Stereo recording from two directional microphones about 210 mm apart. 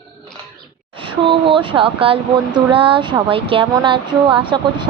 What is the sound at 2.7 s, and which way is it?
Speech, 25° right (ahead or behind).